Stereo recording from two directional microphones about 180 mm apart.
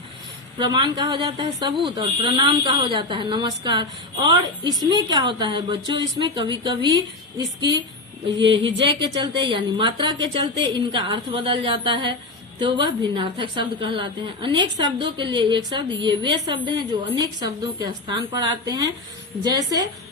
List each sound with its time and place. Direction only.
0.6 s a woman's voice: 25° right (ahead or behind)
8.6 s a woman's voice: 25° right (ahead or behind)